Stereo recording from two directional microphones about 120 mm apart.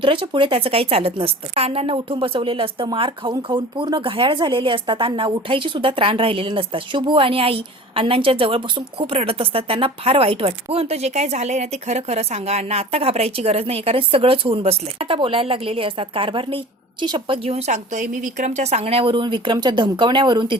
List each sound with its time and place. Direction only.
0.0 s speech: 45° right (ahead or behind)